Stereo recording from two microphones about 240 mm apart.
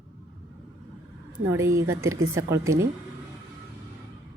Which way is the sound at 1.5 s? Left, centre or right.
Centre.